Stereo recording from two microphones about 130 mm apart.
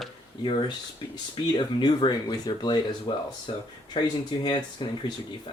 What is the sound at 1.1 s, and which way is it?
Speech, 35° left (ahead or behind).